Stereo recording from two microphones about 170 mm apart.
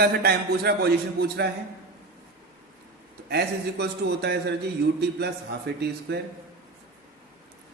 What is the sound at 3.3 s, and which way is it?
A man's voice, 75° right (ahead or behind).